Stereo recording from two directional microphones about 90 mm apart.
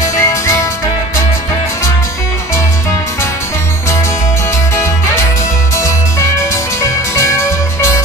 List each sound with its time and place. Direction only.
0.1 s music: 35° left (ahead or behind)
5.8 s music: 35° left (ahead or behind)